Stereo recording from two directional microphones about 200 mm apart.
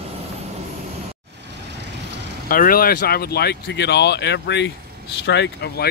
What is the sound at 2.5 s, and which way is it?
Speech, 45° left (ahead or behind).